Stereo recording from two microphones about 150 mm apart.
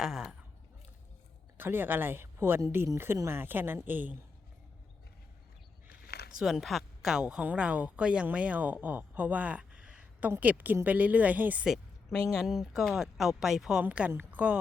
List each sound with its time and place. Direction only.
0.0 s speech: 5° right (ahead or behind)
1.5 s speech: 15° right (ahead or behind)
5.9 s a sound: 90° left
6.4 s speech: centre (ahead or behind)